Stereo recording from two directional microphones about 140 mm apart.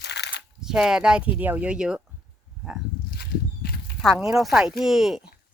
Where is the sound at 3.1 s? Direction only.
90° left.